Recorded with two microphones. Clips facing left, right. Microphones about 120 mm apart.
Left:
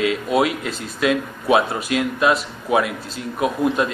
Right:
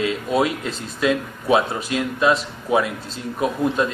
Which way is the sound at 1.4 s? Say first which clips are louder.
Left 1 dB; 25° left (ahead or behind).